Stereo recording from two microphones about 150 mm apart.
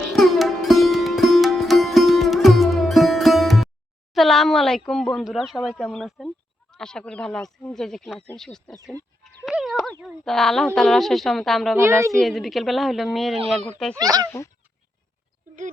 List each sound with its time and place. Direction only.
0.1 s music: centre (ahead or behind)
4.1 s speech: centre (ahead or behind)
9.2 s a sound: centre (ahead or behind)
10.0 s speech: centre (ahead or behind)
11.8 s a woman's voice: 20° right (ahead or behind)
12.2 s speech: centre (ahead or behind)
13.9 s a woman's voice: 25° right (ahead or behind)